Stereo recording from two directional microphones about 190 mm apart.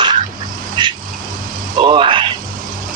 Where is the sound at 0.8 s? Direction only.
25° right (ahead or behind).